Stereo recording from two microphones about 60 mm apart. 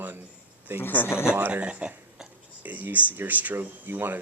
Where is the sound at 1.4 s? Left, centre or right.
Right.